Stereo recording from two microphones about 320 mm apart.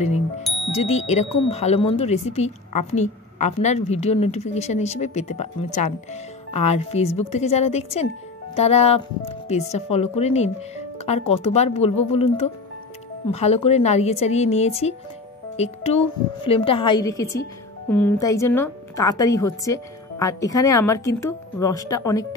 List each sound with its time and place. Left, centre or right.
0.7 s a woman's voice: centre